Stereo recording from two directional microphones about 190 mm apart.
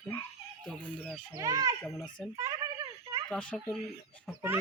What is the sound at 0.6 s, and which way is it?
Speech, 5° left (ahead or behind).